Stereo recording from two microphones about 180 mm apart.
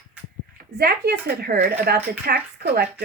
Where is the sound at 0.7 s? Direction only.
60° right (ahead or behind).